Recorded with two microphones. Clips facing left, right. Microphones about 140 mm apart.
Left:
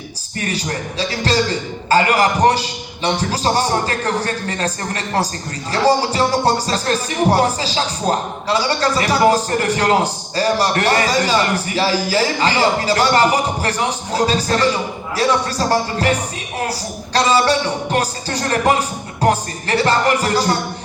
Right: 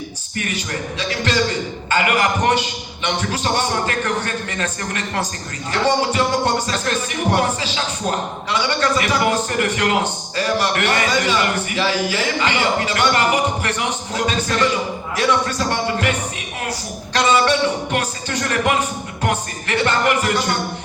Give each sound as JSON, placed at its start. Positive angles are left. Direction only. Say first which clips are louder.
{"t": 0.3, "sound": "speech", "louder": "left 2 dB", "side_deg": 35}
{"t": 17.2, "sound": "speech", "louder": "left 1 dB", "side_deg": 35}